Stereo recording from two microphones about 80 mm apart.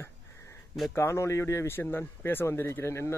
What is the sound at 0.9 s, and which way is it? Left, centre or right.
A man's voice, left.